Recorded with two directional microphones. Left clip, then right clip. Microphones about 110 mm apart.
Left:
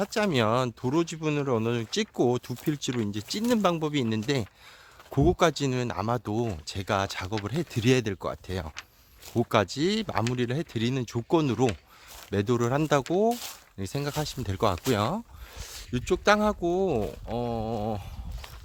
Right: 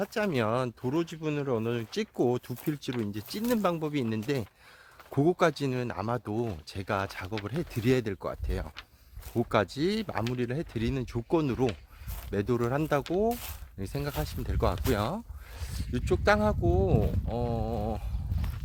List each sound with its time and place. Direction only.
0.0 s speech: 35° left (ahead or behind)
5.1 s speech: 15° left (ahead or behind)
5.7 s speech: 30° left (ahead or behind)
10.2 s speech: 30° left (ahead or behind)
13.7 s speech: 25° left (ahead or behind)
14.2 s speech: 35° left (ahead or behind)